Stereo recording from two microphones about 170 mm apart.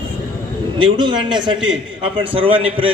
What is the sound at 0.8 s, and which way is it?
A man's voice, 30° right (ahead or behind).